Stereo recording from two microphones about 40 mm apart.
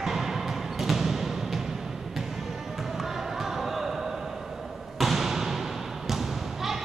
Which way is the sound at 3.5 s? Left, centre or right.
Centre.